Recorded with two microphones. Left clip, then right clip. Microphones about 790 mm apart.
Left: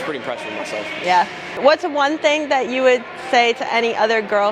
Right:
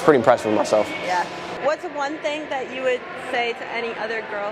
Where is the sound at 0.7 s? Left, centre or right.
Right.